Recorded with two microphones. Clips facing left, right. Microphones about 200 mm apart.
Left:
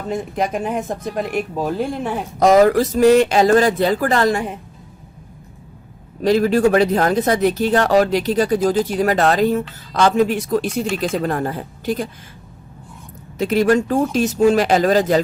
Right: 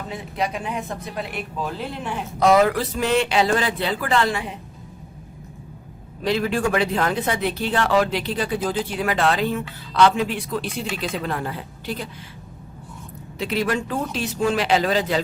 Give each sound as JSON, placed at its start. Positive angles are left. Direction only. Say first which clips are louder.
{"t": 0.1, "sound": "speech", "louder": "left 6 dB", "side_deg": 45}
{"t": 6.2, "sound": "speech", "louder": "left 7 dB", "side_deg": 40}
{"t": 13.4, "sound": "speech", "louder": "left 8 dB", "side_deg": 45}